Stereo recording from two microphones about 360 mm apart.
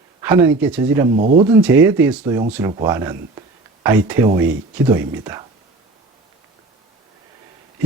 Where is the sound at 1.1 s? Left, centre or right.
Right.